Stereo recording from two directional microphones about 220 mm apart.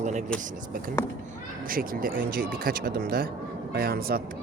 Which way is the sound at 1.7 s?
40° right (ahead or behind).